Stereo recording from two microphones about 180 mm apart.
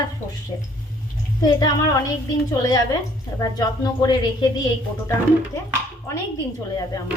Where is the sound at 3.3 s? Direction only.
20° left (ahead or behind).